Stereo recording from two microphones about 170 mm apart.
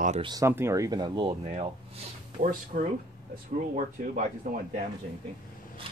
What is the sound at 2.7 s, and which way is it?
Speech, 45° right (ahead or behind).